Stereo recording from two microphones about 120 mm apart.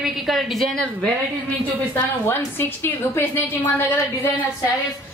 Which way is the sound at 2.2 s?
20° left (ahead or behind).